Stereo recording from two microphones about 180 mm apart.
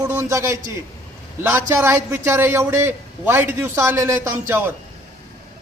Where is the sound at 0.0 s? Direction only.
15° right (ahead or behind).